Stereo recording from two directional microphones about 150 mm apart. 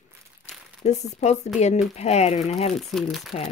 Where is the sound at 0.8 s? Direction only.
50° left (ahead or behind).